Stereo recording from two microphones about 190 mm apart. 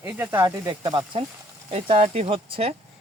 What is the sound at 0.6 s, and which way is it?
Speech, 20° right (ahead or behind).